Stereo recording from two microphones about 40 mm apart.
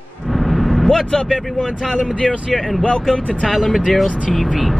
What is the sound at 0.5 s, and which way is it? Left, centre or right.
Vehicle, centre.